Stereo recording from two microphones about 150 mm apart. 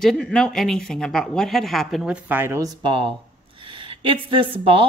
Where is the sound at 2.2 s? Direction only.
15° right (ahead or behind).